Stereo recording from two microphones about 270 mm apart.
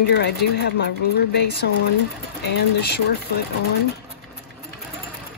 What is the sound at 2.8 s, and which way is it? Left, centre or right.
Speech, left.